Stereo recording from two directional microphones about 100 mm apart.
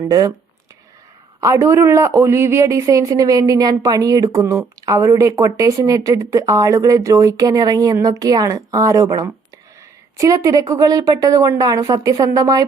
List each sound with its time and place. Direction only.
0.1 s speech: 40° right (ahead or behind)
1.4 s speech: 30° right (ahead or behind)